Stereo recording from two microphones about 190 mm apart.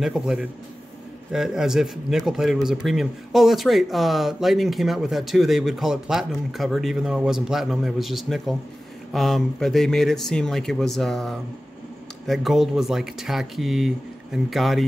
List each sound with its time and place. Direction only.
0.0 s speech: 5° right (ahead or behind)